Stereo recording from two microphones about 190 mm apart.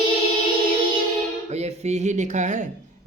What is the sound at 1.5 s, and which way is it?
Speech, 35° right (ahead or behind).